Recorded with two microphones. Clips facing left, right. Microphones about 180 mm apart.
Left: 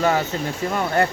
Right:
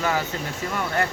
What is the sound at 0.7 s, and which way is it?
Speech, 35° left (ahead or behind).